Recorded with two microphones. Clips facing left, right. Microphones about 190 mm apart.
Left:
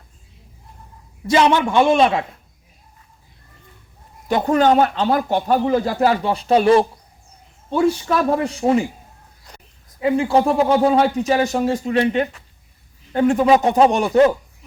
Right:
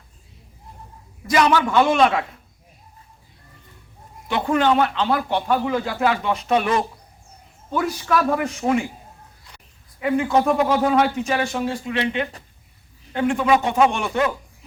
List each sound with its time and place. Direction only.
1.3 s a man's voice: 30° left (ahead or behind)
4.3 s a man's voice: 40° left (ahead or behind)
8.0 s speech: 15° left (ahead or behind)
8.3 s a man's voice: 35° left (ahead or behind)
10.0 s a man's voice: 30° left (ahead or behind)